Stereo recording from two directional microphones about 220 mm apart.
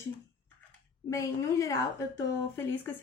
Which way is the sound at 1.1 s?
15° left (ahead or behind).